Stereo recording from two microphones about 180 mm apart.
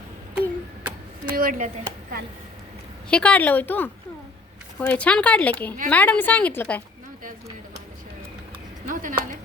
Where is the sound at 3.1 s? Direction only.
5° left (ahead or behind).